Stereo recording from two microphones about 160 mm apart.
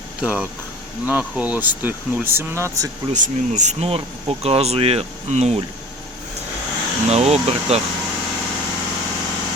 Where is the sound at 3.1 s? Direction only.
50° right (ahead or behind).